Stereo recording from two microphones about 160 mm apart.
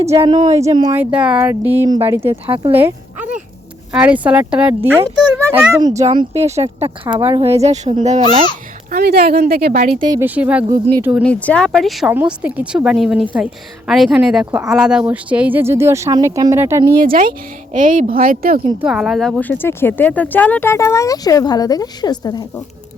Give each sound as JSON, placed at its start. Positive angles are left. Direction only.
{"t": 0.2, "sound": "speech", "side_deg": -35}
{"t": 0.9, "sound": "speech", "side_deg": -5}
{"t": 2.3, "sound": "speech", "side_deg": -35}
{"t": 2.7, "sound": "a sound", "side_deg": -10}
{"t": 3.9, "sound": "speech", "side_deg": -10}
{"t": 6.0, "sound": "speech", "side_deg": -35}
{"t": 8.9, "sound": "speech", "side_deg": -75}
{"t": 10.2, "sound": "speech", "side_deg": -10}
{"t": 11.2, "sound": "speech", "side_deg": 10}
{"t": 17.1, "sound": "a woman's voice", "side_deg": -60}
{"t": 17.7, "sound": "a woman's voice", "side_deg": -50}
{"t": 18.8, "sound": "speech", "side_deg": -5}
{"t": 19.4, "sound": "speech", "side_deg": 10}